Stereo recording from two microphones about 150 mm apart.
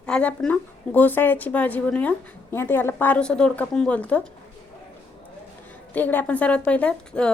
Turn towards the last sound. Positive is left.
turn(degrees=10)  # may be behind; listen again after turning